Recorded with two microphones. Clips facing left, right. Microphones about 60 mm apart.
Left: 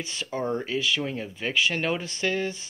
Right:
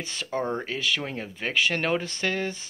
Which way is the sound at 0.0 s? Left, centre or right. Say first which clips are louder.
Right 1 dB; right.